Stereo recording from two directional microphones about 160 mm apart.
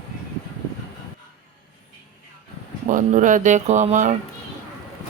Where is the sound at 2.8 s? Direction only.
55° right (ahead or behind).